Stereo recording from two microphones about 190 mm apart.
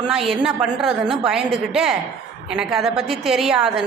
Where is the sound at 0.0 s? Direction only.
Centre (ahead or behind).